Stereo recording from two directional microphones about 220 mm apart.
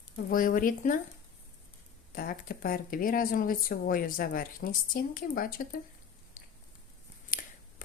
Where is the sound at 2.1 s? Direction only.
40° left (ahead or behind).